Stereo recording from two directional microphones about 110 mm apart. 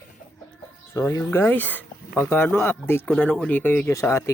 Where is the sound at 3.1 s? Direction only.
5° left (ahead or behind); by 4.3 s 25° left (ahead or behind).